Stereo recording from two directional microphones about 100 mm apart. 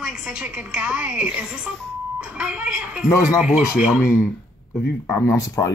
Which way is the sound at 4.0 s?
25° left (ahead or behind).